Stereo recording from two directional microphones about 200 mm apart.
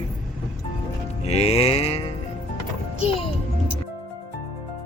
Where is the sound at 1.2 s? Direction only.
30° left (ahead or behind).